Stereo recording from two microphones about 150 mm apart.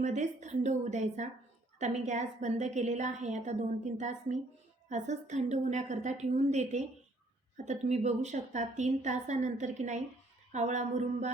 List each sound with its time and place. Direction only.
0.0 s a woman's voice: 50° right (ahead or behind)